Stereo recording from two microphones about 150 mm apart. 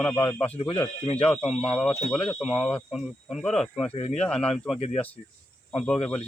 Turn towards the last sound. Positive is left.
turn(degrees=5)  # may be behind; listen again after turning